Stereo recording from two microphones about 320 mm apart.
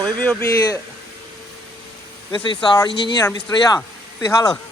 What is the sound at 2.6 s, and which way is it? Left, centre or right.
Speech, centre.